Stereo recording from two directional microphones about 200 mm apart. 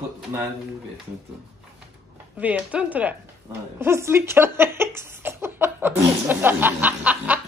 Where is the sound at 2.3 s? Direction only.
5° right (ahead or behind).